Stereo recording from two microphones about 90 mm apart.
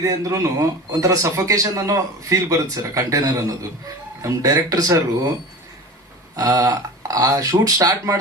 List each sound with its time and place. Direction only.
0.0 s a man's voice: 40° right (ahead or behind)
6.3 s a man's voice: 40° right (ahead or behind)